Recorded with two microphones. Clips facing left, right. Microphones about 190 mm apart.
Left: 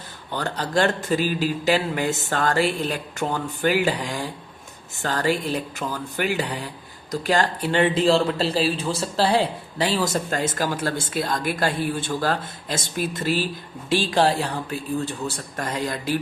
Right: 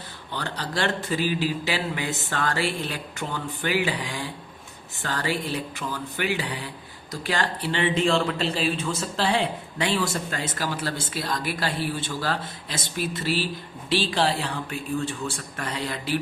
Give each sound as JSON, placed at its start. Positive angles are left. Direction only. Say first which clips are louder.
{"t": 0.3, "sound": "speech", "louder": "left 5 dB", "side_deg": 45}